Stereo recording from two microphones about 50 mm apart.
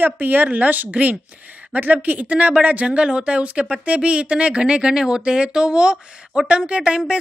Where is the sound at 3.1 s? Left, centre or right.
Centre.